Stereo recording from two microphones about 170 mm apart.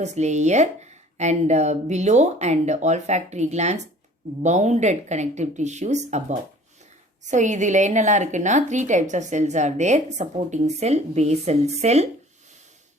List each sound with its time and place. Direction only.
0.0 s a woman's voice: 40° right (ahead or behind)
7.3 s a woman's voice: 45° right (ahead or behind)